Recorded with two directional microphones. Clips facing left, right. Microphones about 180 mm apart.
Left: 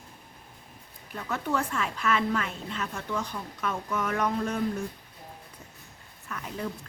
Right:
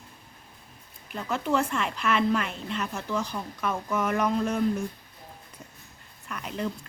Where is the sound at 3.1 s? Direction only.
5° right (ahead or behind).